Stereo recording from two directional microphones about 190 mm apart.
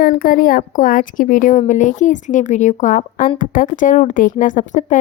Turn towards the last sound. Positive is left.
turn(degrees=40)  # may be behind; listen again after turning